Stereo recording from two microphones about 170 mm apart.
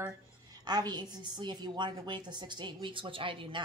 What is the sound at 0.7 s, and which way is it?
A woman's voice, 25° right (ahead or behind).